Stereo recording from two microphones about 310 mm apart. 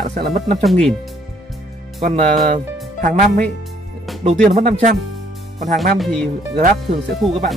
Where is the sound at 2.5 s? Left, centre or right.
Right.